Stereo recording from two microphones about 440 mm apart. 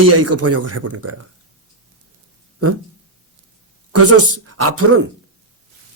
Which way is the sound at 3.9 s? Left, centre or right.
Right.